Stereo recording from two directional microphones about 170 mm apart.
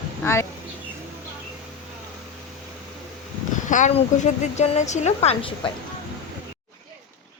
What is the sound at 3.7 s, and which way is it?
Speech, 45° left (ahead or behind).